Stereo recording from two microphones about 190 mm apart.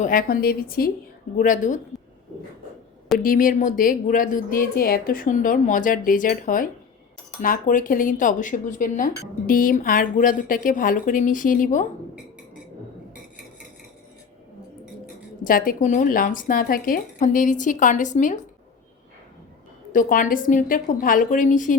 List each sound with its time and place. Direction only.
0.0 s speech: 45° left (ahead or behind)
3.2 s speech: 45° left (ahead or behind)
15.4 s speech: 45° left (ahead or behind)
19.9 s speech: 45° left (ahead or behind)